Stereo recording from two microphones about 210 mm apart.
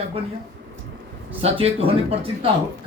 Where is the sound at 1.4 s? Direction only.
30° right (ahead or behind).